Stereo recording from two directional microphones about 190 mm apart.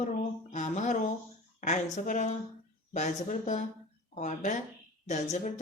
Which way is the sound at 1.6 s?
40° left (ahead or behind).